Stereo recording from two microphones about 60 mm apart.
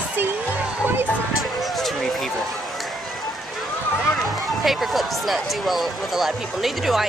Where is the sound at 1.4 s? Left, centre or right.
Centre.